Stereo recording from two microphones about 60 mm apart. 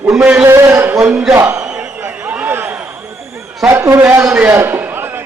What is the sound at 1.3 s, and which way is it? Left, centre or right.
Speech, right.